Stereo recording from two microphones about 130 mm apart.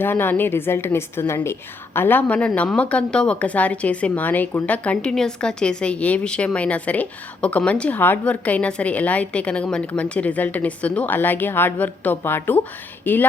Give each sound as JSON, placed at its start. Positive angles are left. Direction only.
{"t": 0.0, "sound": "speech", "side_deg": 15}